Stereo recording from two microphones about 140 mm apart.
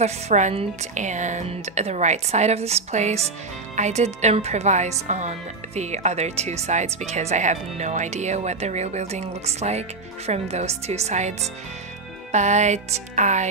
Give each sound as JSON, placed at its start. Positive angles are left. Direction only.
{"t": 0.0, "sound": "speech", "side_deg": -55}